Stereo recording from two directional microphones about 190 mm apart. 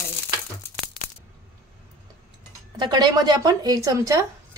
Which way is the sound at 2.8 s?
20° right (ahead or behind).